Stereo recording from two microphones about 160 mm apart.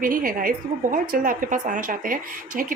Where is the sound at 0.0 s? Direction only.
60° right (ahead or behind).